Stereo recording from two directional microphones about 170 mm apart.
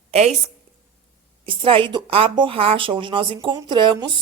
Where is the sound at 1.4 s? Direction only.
30° right (ahead or behind).